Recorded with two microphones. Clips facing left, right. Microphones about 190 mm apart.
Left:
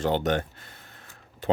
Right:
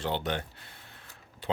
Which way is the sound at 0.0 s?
45° left (ahead or behind).